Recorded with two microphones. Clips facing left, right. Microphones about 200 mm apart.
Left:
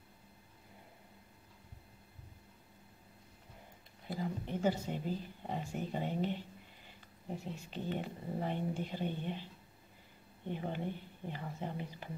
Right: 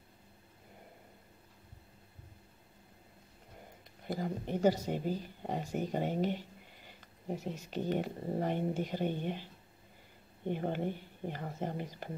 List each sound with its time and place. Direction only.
4.1 s speech: 45° right (ahead or behind)
7.4 s speech: 45° right (ahead or behind)
10.5 s speech: 50° right (ahead or behind)